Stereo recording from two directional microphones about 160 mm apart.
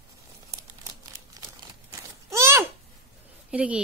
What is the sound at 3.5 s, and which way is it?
Speech, 5° right (ahead or behind).